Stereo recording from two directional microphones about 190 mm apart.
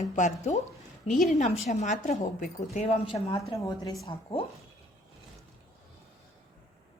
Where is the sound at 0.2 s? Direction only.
35° left (ahead or behind).